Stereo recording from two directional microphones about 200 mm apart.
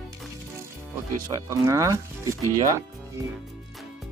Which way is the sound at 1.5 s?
15° right (ahead or behind).